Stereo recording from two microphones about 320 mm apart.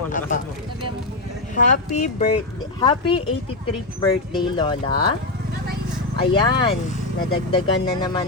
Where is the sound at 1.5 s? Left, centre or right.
Left.